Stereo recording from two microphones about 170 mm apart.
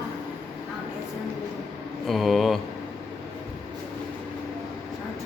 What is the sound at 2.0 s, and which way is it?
Speech, centre (ahead or behind).